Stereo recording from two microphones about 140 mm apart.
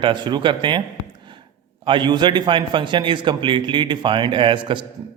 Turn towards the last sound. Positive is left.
turn(degrees=-35)  # may be behind; listen again after turning